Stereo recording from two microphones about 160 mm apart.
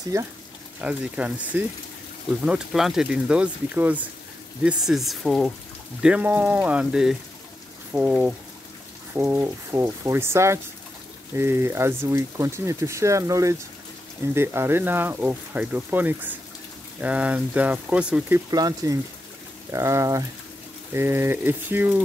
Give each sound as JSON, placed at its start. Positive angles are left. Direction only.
{"t": 0.1, "sound": "speech", "side_deg": -20}
{"t": 0.7, "sound": "speech", "side_deg": -5}
{"t": 18.5, "sound": "speech", "side_deg": -25}